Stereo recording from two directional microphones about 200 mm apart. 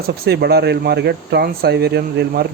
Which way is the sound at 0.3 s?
50° right (ahead or behind).